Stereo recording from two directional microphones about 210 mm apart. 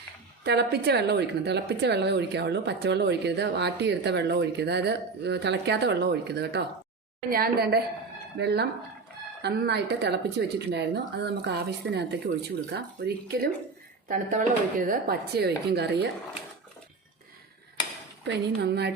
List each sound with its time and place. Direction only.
0.4 s a woman's voice: 50° right (ahead or behind)
18.3 s a woman's voice: 50° right (ahead or behind)